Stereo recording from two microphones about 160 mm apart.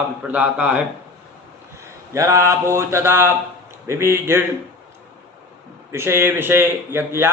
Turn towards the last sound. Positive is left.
turn(degrees=-15)  # may be behind; listen again after turning